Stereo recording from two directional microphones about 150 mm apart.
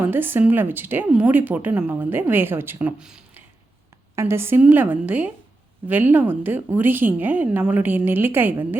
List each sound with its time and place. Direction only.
0.0 s a woman's voice: 15° right (ahead or behind)
4.1 s a woman's voice: 20° right (ahead or behind)